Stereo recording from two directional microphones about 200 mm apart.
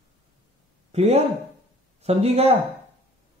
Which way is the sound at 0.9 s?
30° right (ahead or behind).